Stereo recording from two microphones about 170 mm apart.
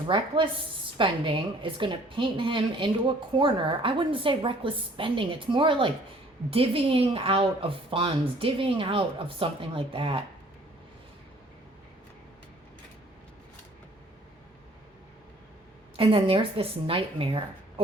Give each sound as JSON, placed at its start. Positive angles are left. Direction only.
{"t": 0.1, "sound": "a woman's voice", "side_deg": -30}
{"t": 16.0, "sound": "a woman's voice", "side_deg": -35}